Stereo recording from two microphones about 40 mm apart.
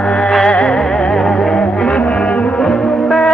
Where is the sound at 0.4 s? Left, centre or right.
Left.